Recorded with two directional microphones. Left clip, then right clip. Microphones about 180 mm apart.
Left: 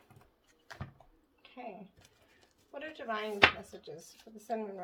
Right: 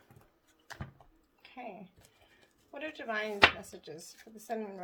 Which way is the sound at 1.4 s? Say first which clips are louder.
Right 1 dB; 35° right (ahead or behind).